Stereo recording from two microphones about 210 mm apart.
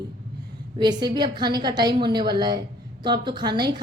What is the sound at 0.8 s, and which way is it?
A woman's voice, 20° right (ahead or behind).